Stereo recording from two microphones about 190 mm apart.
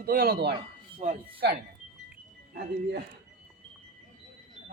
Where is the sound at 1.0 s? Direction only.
40° right (ahead or behind).